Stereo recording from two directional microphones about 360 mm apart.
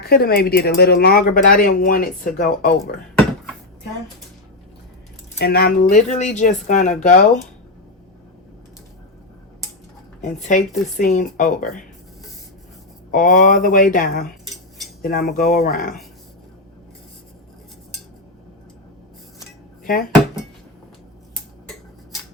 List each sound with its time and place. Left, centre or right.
0.0 s speech: left
5.4 s speech: left
10.2 s speech: centre
13.1 s speech: left
19.8 s speech: left